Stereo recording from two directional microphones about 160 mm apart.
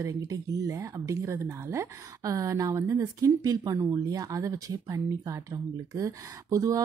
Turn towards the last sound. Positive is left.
turn(degrees=-20)  # may be behind; listen again after turning